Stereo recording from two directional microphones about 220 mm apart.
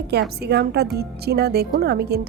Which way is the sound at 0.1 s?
50° right (ahead or behind).